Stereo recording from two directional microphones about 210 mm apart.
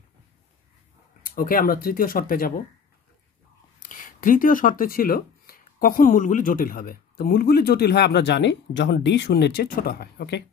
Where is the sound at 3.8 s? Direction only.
40° left (ahead or behind).